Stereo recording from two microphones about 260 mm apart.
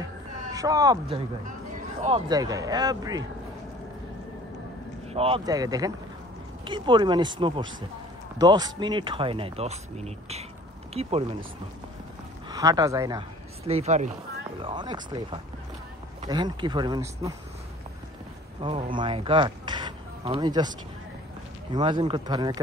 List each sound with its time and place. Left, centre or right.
0.5 s speech: centre
2.0 s speech: centre
5.1 s speech: right
12.4 s speech: centre
13.7 s speech: right
18.6 s speech: centre
21.7 s speech: centre